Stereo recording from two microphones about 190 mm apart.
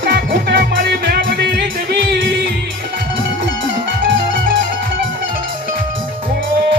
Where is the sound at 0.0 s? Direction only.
60° right (ahead or behind).